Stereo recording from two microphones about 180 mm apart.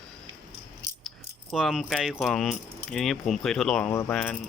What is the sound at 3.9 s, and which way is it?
Speech, 15° left (ahead or behind).